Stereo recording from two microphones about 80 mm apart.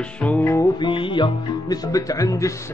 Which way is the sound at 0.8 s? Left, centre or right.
Left.